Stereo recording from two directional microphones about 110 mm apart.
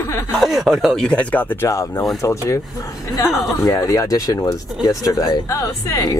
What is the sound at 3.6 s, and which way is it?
Speech, 30° left (ahead or behind).